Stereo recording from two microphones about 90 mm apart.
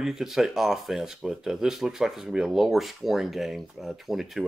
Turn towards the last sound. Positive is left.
turn(degrees=-5)  # may be behind; listen again after turning